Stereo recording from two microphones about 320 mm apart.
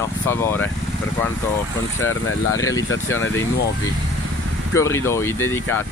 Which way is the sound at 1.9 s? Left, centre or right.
Left.